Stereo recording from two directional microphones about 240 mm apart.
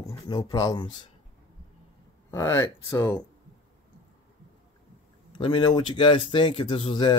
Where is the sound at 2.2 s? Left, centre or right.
Centre.